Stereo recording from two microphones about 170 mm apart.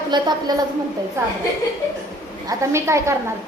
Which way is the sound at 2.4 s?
15° right (ahead or behind).